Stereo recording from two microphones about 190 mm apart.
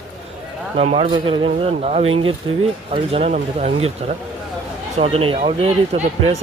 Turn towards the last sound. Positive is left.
turn(degrees=-35)  # may be behind; listen again after turning